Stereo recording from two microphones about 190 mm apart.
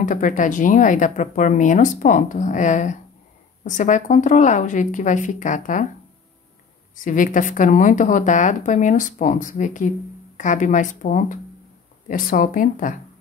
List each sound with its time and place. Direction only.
0.0 s a woman's voice: 45° left (ahead or behind)
7.0 s a woman's voice: 45° left (ahead or behind)